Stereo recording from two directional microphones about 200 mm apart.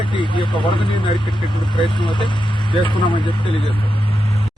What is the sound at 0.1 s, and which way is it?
Speech, 25° left (ahead or behind).